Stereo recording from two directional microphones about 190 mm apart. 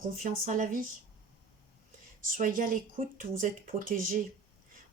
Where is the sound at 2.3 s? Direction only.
45° right (ahead or behind).